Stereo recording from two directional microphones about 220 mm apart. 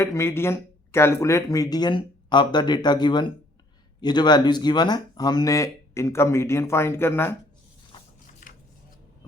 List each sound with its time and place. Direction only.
0.0 s speech: 10° left (ahead or behind)
8.4 s scissors: 40° left (ahead or behind)